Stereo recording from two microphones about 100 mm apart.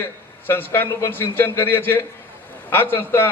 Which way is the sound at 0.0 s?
20° left (ahead or behind).